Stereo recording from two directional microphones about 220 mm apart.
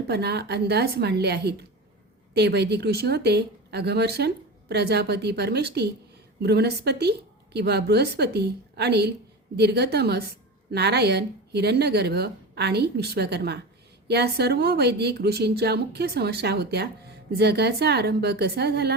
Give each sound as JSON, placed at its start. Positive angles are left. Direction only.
{"t": 0.1, "sound": "speech", "side_deg": -50}